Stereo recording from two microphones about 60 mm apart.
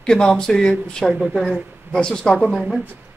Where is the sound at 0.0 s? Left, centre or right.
Centre.